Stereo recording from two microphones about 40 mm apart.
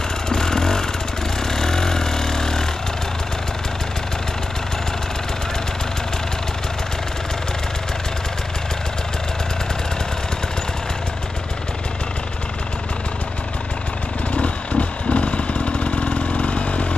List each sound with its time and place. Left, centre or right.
0.3 s vehicle: centre
14.3 s vehicle: left